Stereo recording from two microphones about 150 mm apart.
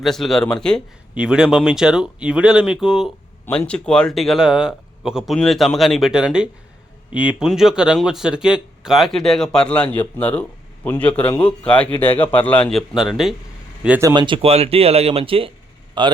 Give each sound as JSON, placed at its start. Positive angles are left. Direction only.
{"t": 0.0, "sound": "speech", "side_deg": 0}
{"t": 1.1, "sound": "speech", "side_deg": -5}
{"t": 3.4, "sound": "a man's voice", "side_deg": 10}
{"t": 12.9, "sound": "speech", "side_deg": 0}
{"t": 14.0, "sound": "speech", "side_deg": -30}